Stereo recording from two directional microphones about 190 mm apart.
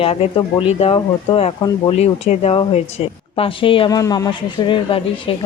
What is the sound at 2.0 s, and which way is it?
A woman's voice, 35° left (ahead or behind).